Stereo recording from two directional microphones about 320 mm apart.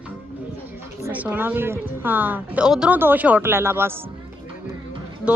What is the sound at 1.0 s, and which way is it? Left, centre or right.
A woman's voice, centre.